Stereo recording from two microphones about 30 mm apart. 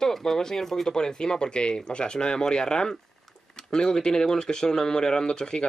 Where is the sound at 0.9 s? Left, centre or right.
Left.